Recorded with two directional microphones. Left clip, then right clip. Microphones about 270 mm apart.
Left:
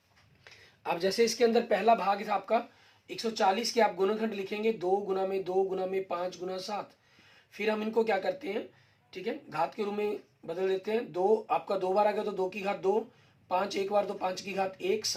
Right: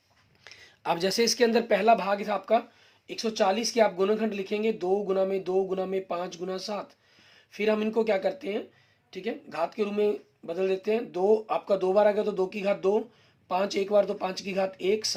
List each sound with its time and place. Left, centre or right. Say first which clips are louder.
0.4 s speech: right 5 dB; right